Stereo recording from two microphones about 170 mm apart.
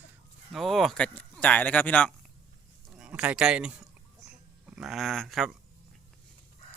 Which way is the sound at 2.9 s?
5° right (ahead or behind).